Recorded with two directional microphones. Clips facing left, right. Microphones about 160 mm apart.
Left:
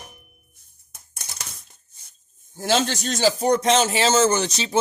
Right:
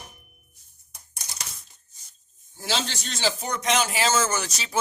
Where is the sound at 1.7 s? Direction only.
55° left (ahead or behind); by 4.7 s 25° left (ahead or behind).